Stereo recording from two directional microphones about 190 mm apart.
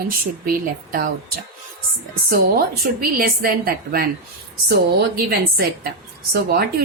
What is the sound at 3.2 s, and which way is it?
A woman's voice, 50° right (ahead or behind).